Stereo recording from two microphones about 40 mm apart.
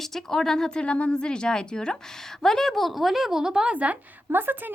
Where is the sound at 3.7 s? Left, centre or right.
Right.